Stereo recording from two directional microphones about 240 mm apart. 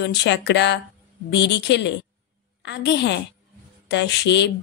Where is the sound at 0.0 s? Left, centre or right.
Left.